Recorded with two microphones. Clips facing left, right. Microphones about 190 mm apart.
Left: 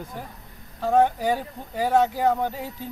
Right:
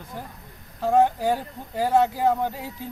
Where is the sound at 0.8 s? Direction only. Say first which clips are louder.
Even; 10° right (ahead or behind).